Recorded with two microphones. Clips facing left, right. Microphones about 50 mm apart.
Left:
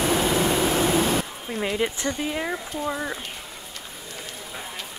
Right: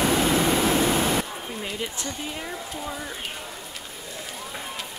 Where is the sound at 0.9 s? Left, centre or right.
Centre.